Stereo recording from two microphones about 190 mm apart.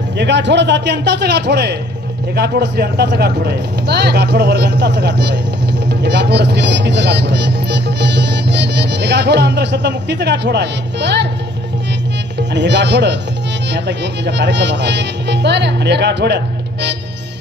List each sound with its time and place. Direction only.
0.2 s speech: 65° right (ahead or behind)
12.4 s speech: 65° right (ahead or behind)